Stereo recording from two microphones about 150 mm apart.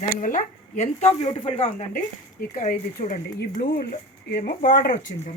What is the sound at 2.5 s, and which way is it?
Speech, 60° left (ahead or behind).